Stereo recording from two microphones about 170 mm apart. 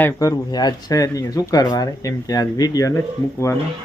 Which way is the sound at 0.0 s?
20° left (ahead or behind).